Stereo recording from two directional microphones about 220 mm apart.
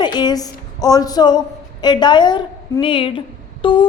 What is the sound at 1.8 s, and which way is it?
A woman's voice, 20° left (ahead or behind).